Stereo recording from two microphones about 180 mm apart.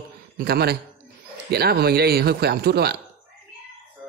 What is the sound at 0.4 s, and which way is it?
Speech, 60° right (ahead or behind).